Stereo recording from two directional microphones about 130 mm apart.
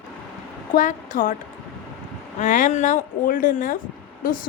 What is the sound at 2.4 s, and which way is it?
A woman's voice, 75° left (ahead or behind).